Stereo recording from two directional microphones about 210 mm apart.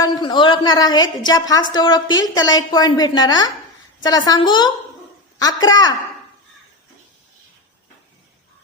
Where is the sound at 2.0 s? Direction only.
65° left (ahead or behind).